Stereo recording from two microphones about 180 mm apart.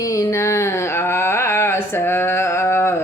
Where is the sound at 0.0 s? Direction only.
15° left (ahead or behind).